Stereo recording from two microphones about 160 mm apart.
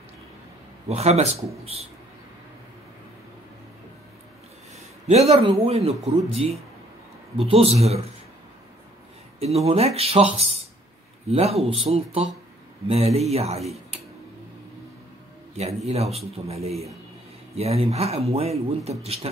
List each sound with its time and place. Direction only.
0.8 s speech: 40° right (ahead or behind)
4.7 s speech: 40° right (ahead or behind)
9.7 s speech: 40° right (ahead or behind)
15.9 s speech: 40° right (ahead or behind)